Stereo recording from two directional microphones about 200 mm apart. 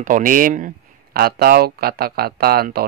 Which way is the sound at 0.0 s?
40° right (ahead or behind).